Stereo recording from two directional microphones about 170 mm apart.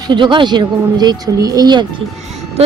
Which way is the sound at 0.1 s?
25° right (ahead or behind).